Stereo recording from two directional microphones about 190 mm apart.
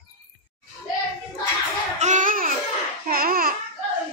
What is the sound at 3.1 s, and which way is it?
Babbling, 50° right (ahead or behind).